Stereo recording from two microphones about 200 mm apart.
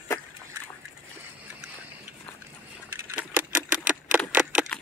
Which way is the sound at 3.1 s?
5° right (ahead or behind).